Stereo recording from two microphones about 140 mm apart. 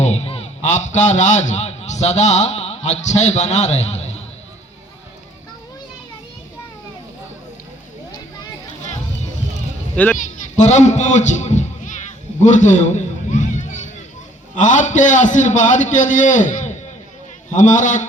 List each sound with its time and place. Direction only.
0.0 s a man's voice: 50° left (ahead or behind)
9.9 s a child's voice: 10° left (ahead or behind)
10.2 s a child's voice: 60° left (ahead or behind)
12.4 s a sound: 60° left (ahead or behind)
14.5 s a man's voice: 60° left (ahead or behind)